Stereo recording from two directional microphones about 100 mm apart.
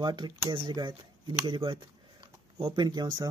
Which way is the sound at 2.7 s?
45° right (ahead or behind).